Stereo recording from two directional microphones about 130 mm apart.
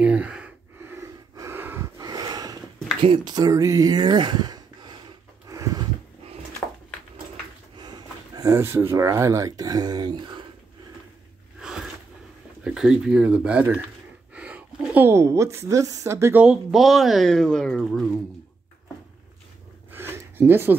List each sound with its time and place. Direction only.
0.0 s gasp: 10° right (ahead or behind)
0.9 s breathing: 25° right (ahead or behind)
2.0 s snort: 30° right (ahead or behind)
3.0 s speech: 40° right (ahead or behind)
5.5 s a sound: 25° right (ahead or behind)
7.8 s speech: 30° right (ahead or behind)
11.6 s a sound: 5° right (ahead or behind)
12.6 s a woman's voice: 5° right (ahead or behind)
16.4 s speech: centre (ahead or behind)
17.8 s speech: 5° right (ahead or behind)
19.9 s a sound: 15° right (ahead or behind)